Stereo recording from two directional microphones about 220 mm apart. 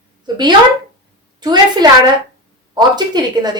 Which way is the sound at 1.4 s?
20° right (ahead or behind).